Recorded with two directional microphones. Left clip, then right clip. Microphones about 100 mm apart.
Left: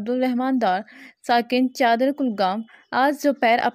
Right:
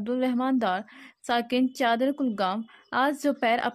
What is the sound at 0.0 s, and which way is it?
A woman's voice, 35° left (ahead or behind).